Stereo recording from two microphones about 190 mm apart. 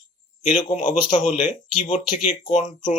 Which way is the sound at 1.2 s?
40° left (ahead or behind).